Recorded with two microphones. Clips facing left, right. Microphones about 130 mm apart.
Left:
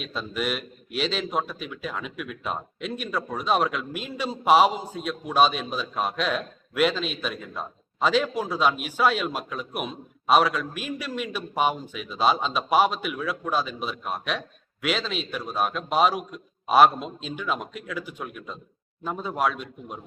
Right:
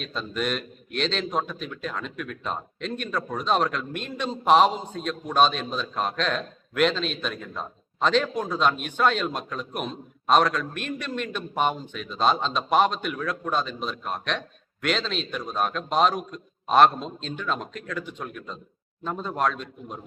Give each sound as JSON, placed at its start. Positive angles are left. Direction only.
{"t": 0.0, "sound": "a man's voice", "side_deg": 5}